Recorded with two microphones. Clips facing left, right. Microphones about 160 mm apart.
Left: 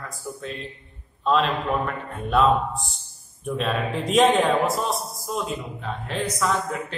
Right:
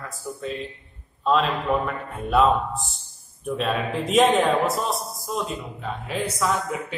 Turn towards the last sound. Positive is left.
turn(degrees=-5)  # may be behind; listen again after turning